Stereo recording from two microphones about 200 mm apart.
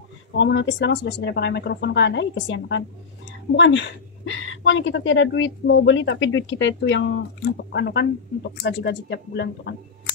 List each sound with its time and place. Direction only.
0.3 s a woman's voice: 65° left (ahead or behind)